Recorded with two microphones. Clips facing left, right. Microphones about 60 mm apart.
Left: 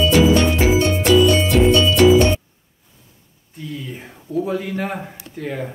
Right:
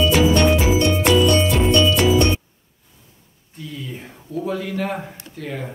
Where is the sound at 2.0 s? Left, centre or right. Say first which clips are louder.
Left 6 dB; left.